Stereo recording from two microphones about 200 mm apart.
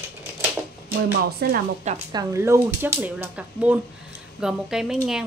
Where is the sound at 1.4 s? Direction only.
50° right (ahead or behind).